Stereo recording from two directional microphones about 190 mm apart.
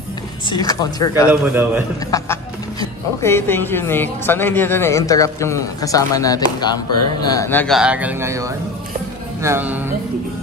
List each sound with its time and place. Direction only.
0.5 s speech: 20° left (ahead or behind)
1.3 s speech: 10° right (ahead or behind)
2.0 s speech: 15° left (ahead or behind)
7.7 s speech: 5° right (ahead or behind)